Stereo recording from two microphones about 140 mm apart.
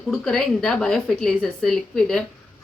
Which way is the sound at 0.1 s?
5° left (ahead or behind).